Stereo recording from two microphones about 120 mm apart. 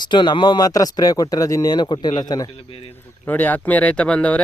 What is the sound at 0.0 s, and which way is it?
Speech, 40° left (ahead or behind).